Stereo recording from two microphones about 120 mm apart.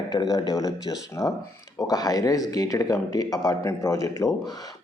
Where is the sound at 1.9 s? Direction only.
30° left (ahead or behind).